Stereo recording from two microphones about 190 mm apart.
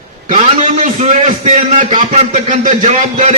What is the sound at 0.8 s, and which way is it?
A man's voice, 40° right (ahead or behind).